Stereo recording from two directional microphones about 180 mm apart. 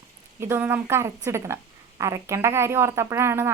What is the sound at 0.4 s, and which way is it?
Speech, 10° right (ahead or behind).